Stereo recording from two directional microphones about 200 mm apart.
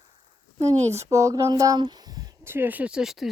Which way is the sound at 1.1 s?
15° right (ahead or behind).